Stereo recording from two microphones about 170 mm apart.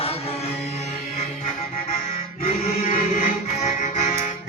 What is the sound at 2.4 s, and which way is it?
Music, 35° left (ahead or behind).